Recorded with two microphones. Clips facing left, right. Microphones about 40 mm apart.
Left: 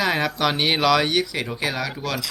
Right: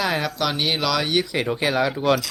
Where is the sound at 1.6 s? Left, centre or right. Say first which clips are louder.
Right 5 dB; centre.